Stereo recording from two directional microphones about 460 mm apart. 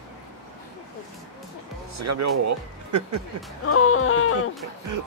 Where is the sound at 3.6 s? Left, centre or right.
Left.